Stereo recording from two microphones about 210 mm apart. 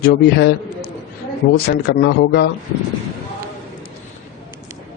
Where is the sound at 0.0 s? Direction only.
50° left (ahead or behind).